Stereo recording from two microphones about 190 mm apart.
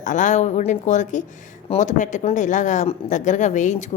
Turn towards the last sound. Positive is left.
turn(degrees=40)  # may be behind; listen again after turning